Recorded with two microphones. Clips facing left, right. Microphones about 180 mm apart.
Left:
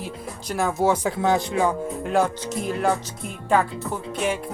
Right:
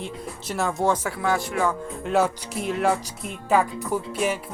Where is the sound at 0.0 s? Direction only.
Centre (ahead or behind).